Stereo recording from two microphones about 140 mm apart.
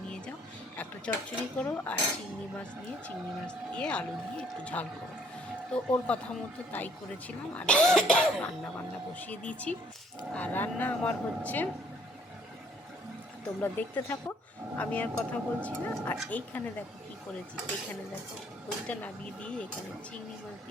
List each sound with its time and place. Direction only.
1.1 s speech: 10° left (ahead or behind)
3.4 s speech: 5° left (ahead or behind)
13.6 s speech: 15° left (ahead or behind)
18.9 s speech: 10° left (ahead or behind)